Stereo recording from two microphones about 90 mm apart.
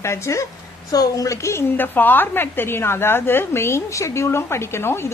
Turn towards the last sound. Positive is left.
turn(degrees=25)  # may be behind; listen again after turning